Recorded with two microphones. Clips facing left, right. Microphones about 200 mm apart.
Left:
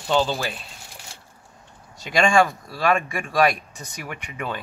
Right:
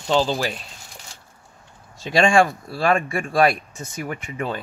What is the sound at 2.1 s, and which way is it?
Speech, 30° right (ahead or behind).